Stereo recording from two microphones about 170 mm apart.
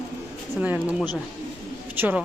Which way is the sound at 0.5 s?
10° right (ahead or behind).